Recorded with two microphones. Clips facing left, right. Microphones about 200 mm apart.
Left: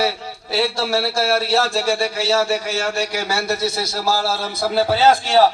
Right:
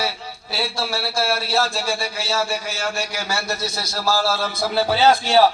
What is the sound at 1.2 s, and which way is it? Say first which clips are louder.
A man's voice: left 1 dB; 80° left.